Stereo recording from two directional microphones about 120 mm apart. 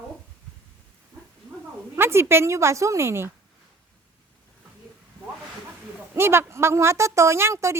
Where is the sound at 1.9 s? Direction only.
20° right (ahead or behind).